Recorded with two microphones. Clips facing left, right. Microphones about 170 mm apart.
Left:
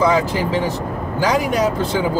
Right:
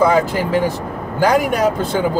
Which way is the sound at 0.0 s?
55° right (ahead or behind).